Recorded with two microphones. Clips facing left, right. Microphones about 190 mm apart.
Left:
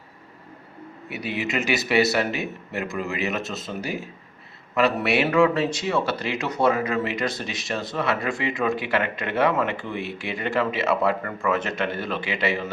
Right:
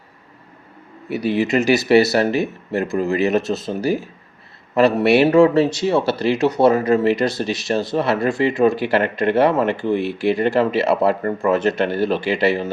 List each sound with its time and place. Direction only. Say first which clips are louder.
1.1 s speech: right 9 dB; 35° right (ahead or behind)